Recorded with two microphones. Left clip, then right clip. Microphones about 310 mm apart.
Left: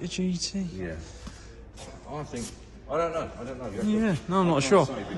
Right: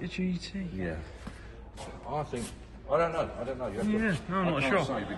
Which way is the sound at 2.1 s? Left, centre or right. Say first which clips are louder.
Right 2 dB; centre.